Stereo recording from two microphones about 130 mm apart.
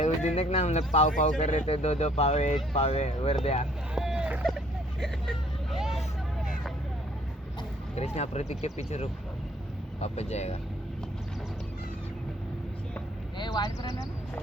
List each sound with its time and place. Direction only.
0.0 s speech: 60° left (ahead or behind)
3.9 s vehicle: 5° right (ahead or behind)
7.9 s speech: 55° left (ahead or behind)
13.4 s speech: 30° left (ahead or behind)